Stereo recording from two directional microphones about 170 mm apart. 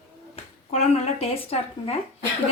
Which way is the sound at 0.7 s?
35° left (ahead or behind).